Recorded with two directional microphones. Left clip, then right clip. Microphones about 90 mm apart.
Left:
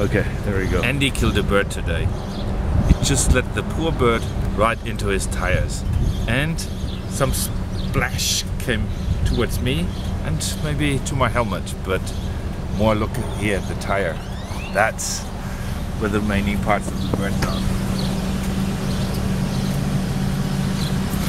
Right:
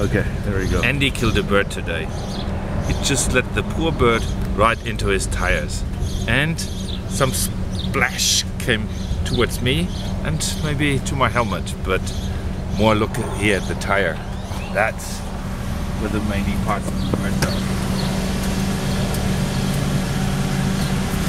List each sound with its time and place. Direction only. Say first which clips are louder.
0.1 s speech: even; 5° left (ahead or behind)
3.0 s speech: right 3 dB; centre (ahead or behind)
12.7 s speech: right 2 dB; 15° right (ahead or behind)
14.8 s speech: left 1 dB; 20° left (ahead or behind)